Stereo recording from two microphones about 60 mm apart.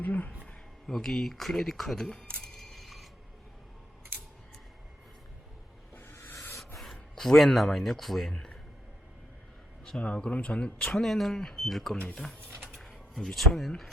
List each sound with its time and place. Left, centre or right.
0.0 s a sound: left
0.9 s speech: centre
5.9 s music: left
6.3 s rub: left
6.7 s speech: centre
8.3 s speech: centre
10.0 s speech: centre
11.0 s speech: centre
12.5 s a sound: right
12.7 s speech: centre